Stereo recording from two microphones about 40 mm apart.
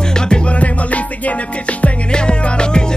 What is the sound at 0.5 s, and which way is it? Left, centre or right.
Music, left.